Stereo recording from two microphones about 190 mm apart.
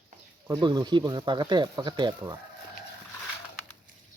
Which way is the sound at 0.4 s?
25° right (ahead or behind).